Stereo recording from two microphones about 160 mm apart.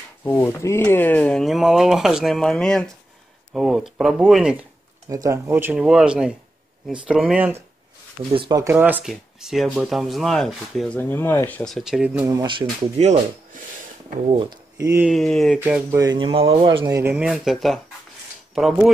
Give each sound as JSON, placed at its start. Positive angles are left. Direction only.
{"t": 0.2, "sound": "speech", "side_deg": 10}
{"t": 5.1, "sound": "speech", "side_deg": -20}
{"t": 8.3, "sound": "speech", "side_deg": -30}
{"t": 8.7, "sound": "speech", "side_deg": -10}
{"t": 12.3, "sound": "speech", "side_deg": -25}
{"t": 13.0, "sound": "speech", "side_deg": -45}
{"t": 14.2, "sound": "speech", "side_deg": -35}
{"t": 14.8, "sound": "speech", "side_deg": -20}
{"t": 15.0, "sound": "speech", "side_deg": 0}
{"t": 15.6, "sound": "speech", "side_deg": -15}
{"t": 17.1, "sound": "speech", "side_deg": 0}